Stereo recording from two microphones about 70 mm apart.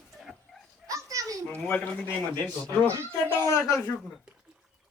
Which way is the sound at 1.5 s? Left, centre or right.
Centre.